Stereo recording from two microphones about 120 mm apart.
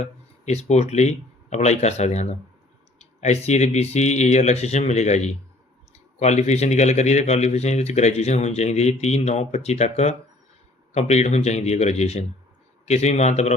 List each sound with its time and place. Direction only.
0.0 s speech: 65° left (ahead or behind)